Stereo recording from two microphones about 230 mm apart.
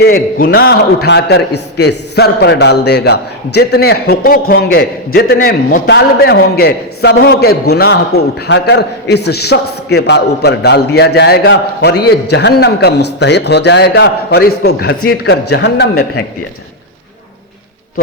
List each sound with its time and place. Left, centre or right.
0.0 s a man's voice: left